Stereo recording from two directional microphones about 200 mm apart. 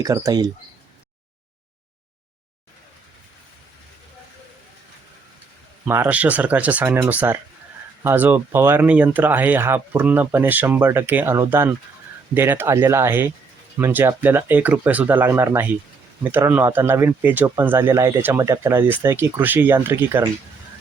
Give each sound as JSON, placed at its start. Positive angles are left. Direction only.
{"t": 0.0, "sound": "speech", "side_deg": -20}
{"t": 5.8, "sound": "speech", "side_deg": -10}